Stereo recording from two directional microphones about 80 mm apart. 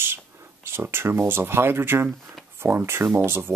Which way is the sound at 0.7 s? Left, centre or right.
Right.